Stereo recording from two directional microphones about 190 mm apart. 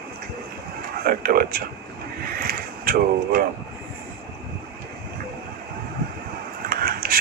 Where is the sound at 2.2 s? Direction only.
50° right (ahead or behind).